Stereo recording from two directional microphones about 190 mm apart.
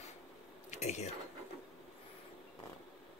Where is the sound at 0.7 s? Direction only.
35° left (ahead or behind).